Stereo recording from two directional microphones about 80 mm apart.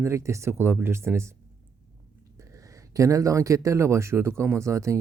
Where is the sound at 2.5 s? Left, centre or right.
Right.